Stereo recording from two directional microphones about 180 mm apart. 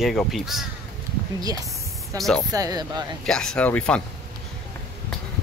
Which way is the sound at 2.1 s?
Centre (ahead or behind).